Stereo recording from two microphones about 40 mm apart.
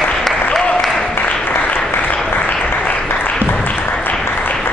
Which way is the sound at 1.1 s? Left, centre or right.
Left.